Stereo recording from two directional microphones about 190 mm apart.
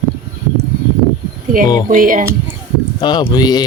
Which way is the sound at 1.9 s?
45° right (ahead or behind).